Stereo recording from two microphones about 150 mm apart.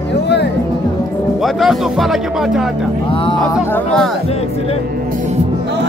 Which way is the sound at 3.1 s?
35° left (ahead or behind).